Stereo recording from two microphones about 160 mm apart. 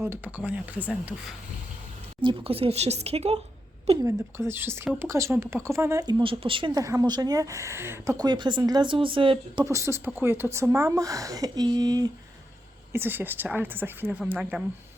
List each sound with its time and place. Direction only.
0.0 s a woman's voice: 10° right (ahead or behind)
2.2 s speech: 35° right (ahead or behind)
4.0 s a woman's voice: 15° right (ahead or behind); by 9.6 s 35° right (ahead or behind)
9.6 s speech: 20° right (ahead or behind)
12.9 s a woman's voice: 15° right (ahead or behind)